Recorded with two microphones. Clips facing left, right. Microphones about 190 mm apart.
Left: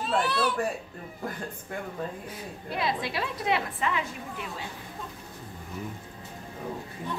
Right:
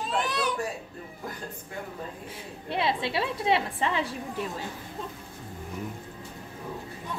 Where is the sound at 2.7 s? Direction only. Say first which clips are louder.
Right 2 dB; 25° right (ahead or behind).